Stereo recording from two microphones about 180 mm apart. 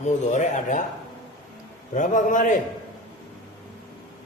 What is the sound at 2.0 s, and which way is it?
Speech, 45° left (ahead or behind).